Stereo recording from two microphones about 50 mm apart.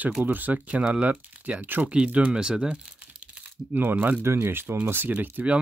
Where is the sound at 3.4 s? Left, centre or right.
Right.